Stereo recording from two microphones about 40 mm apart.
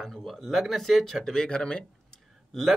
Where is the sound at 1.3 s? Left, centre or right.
Centre.